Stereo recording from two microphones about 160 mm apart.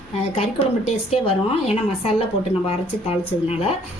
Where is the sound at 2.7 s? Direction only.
40° left (ahead or behind).